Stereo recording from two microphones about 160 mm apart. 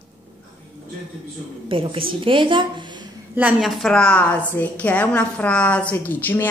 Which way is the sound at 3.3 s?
10° right (ahead or behind).